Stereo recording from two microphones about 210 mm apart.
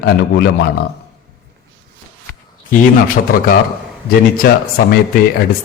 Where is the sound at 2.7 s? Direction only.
40° left (ahead or behind).